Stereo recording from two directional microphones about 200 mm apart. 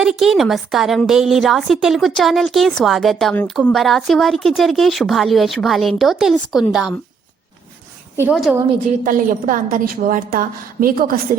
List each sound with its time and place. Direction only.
0.0 s a woman's voice: centre (ahead or behind)
8.1 s a woman's voice: 10° right (ahead or behind)
9.0 s a woman's voice: 40° right (ahead or behind)